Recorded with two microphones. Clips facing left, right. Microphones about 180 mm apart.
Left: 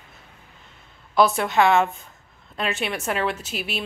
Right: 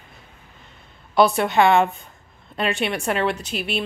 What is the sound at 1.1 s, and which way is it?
Speech, centre (ahead or behind).